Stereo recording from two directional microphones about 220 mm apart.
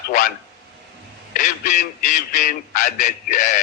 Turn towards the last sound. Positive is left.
turn(degrees=35)  # may be behind; listen again after turning